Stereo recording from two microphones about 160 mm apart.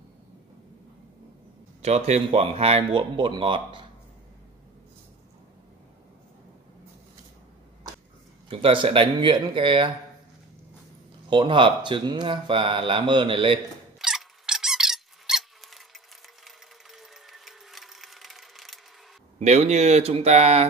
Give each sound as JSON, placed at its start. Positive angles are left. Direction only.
{"t": 1.8, "sound": "speech", "side_deg": -45}
{"t": 8.5, "sound": "speech", "side_deg": -35}
{"t": 11.2, "sound": "speech", "side_deg": -30}
{"t": 13.9, "sound": "squeak", "side_deg": -5}
{"t": 16.4, "sound": "a sound", "side_deg": 0}
{"t": 19.3, "sound": "speech", "side_deg": -45}